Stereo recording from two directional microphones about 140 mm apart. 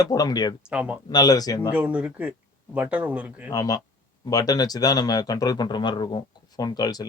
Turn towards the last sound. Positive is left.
turn(degrees=30)  # may be behind; listen again after turning